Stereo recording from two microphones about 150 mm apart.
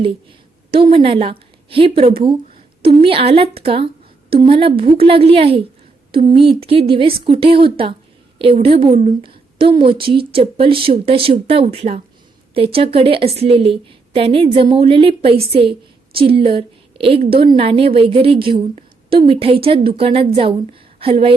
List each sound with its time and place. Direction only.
0.0 s a woman's voice: 35° right (ahead or behind)